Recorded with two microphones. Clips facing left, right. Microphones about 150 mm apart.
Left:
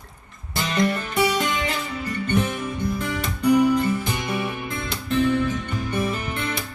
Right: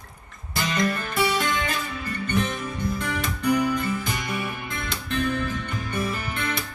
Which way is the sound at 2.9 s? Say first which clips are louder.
Left 1 dB; 25° left (ahead or behind).